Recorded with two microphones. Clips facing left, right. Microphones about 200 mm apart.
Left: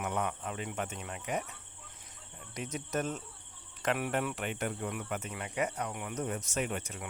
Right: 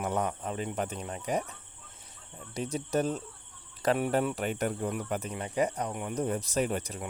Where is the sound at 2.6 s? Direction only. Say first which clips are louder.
Right 5 dB; 30° right (ahead or behind).